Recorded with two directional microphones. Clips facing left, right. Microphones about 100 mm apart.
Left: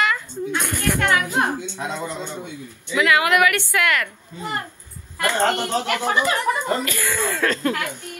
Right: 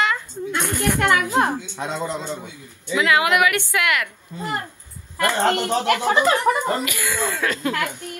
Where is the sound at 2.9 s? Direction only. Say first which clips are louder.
Even; 25° right (ahead or behind).